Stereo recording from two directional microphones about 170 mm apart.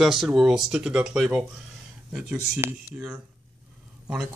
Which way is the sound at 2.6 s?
10° right (ahead or behind).